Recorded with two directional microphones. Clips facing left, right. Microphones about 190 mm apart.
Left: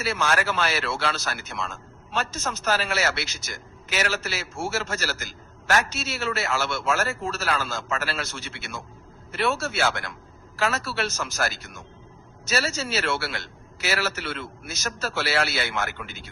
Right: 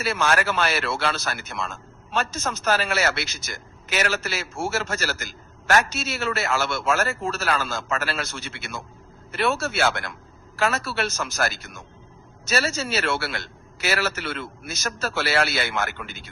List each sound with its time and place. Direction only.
0.0 s a man's voice: 55° right (ahead or behind)